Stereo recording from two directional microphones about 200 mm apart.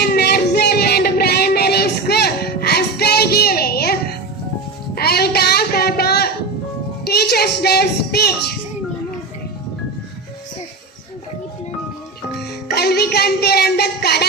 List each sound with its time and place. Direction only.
0.0 s music: 50° left (ahead or behind)
4.9 s a sound: 50° left (ahead or behind)
7.0 s music: 50° left (ahead or behind)
12.6 s music: 50° left (ahead or behind)